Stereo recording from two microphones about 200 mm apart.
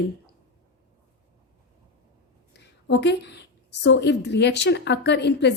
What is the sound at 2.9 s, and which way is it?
A woman's voice, 60° left (ahead or behind).